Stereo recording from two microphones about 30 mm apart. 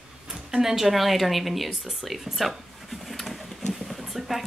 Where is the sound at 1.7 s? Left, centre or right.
Centre.